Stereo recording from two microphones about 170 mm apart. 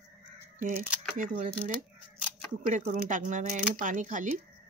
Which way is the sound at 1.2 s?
50° right (ahead or behind).